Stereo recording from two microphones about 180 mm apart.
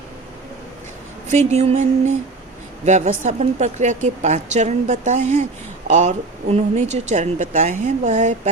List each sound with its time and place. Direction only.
1.3 s a woman's voice: 40° right (ahead or behind)